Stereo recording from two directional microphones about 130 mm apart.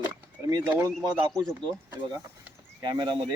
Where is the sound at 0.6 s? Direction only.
15° right (ahead or behind).